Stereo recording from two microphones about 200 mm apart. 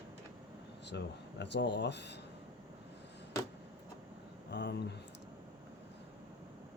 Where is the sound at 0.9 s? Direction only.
60° left (ahead or behind).